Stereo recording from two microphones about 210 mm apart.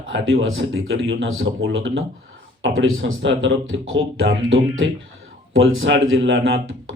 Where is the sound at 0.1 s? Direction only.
65° right (ahead or behind).